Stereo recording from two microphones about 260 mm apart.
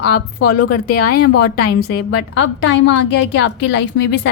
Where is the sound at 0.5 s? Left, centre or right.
Left.